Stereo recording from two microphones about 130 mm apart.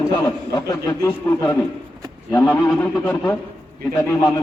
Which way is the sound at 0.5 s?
25° left (ahead or behind).